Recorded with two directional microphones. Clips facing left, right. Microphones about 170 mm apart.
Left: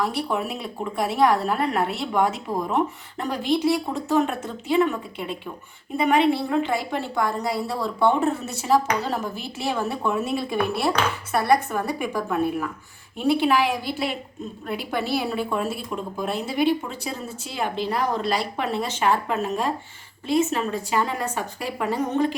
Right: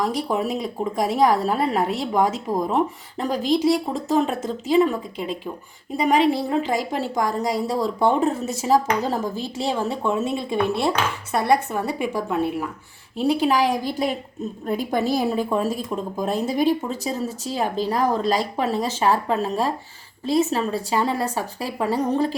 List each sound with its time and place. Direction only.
0.0 s a woman's voice: 35° right (ahead or behind)
8.6 s a woman's voice: 30° right (ahead or behind)
13.1 s a woman's voice: 40° right (ahead or behind)